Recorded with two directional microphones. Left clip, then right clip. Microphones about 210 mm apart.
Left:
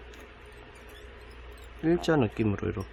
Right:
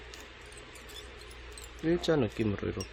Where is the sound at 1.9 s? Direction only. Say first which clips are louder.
Left 3 dB; 15° left (ahead or behind).